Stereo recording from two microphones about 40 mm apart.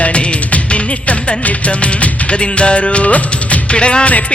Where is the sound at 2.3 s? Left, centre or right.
Left.